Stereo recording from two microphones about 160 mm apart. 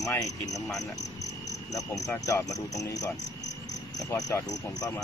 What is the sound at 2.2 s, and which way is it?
Speech, 20° left (ahead or behind).